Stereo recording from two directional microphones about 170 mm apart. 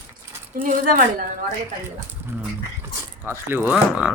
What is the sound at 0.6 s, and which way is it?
Speech, 50° right (ahead or behind).